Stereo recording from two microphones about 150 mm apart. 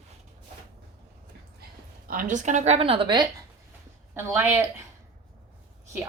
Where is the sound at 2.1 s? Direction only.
65° right (ahead or behind); by 3.3 s 35° right (ahead or behind).